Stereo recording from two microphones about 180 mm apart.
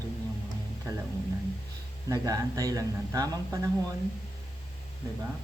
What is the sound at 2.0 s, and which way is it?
A woman's voice, 20° right (ahead or behind).